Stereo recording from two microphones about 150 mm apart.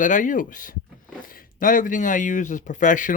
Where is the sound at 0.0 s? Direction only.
60° left (ahead or behind).